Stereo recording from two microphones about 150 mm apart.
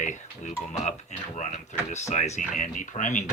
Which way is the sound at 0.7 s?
50° left (ahead or behind).